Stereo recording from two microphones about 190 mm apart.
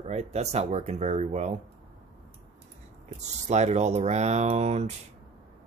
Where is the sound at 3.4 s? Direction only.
35° right (ahead or behind).